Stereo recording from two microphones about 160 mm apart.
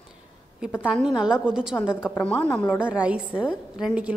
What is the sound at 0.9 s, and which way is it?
Speech, 5° right (ahead or behind).